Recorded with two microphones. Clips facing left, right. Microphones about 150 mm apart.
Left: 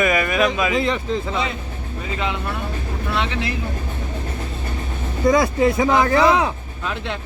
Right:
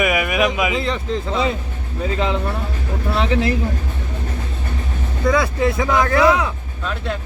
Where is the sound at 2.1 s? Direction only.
30° right (ahead or behind).